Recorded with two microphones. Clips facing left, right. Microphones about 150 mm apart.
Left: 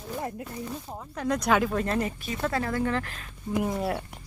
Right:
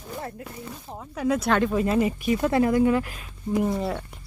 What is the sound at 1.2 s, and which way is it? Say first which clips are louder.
Speech: right 2 dB; 5° right (ahead or behind).